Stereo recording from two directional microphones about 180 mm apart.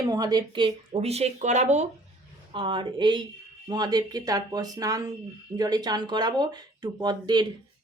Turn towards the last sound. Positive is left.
turn(degrees=-25)  # may be behind; listen again after turning